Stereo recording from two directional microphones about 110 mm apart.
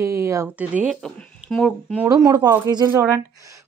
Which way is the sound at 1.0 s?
5° left (ahead or behind).